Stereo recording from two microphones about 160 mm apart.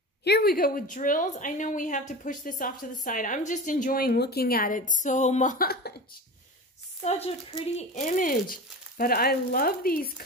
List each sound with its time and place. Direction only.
0.2 s a woman's voice: 80° left
7.0 s a woman's voice: 40° left (ahead or behind); by 10.2 s 65° left (ahead or behind)